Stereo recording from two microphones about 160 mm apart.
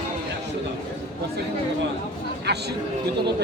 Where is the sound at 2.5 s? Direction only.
90° right.